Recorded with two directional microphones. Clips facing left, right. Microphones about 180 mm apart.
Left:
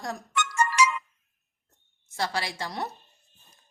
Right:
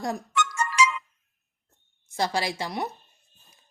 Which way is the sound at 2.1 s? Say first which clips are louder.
Right 4 dB; 15° right (ahead or behind).